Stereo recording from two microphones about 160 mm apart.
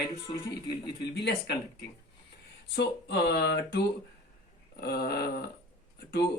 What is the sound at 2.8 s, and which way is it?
Speech, 90° left.